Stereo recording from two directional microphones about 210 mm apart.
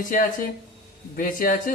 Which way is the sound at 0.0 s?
40° left (ahead or behind).